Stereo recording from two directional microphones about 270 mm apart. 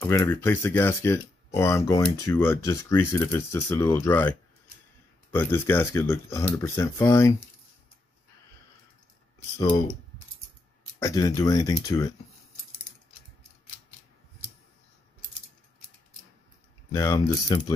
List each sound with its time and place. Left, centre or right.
0.0 s speech: centre
9.6 s speech: centre
11.0 s speech: centre
16.9 s speech: centre